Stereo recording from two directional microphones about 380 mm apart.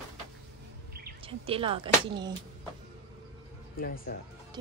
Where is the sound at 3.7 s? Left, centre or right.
Left.